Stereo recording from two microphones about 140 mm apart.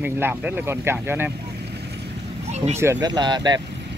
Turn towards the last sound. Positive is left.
turn(degrees=-30)  # may be behind; listen again after turning